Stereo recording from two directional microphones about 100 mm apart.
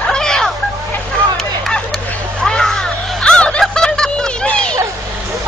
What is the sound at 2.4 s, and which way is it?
Snicker, 5° left (ahead or behind).